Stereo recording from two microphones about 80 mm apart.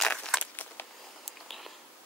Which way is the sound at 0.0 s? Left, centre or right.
Centre.